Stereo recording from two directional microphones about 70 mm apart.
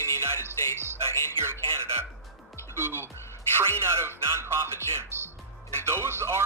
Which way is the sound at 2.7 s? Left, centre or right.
Right.